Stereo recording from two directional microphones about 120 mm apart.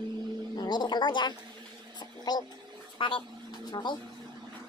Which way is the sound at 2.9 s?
45° left (ahead or behind).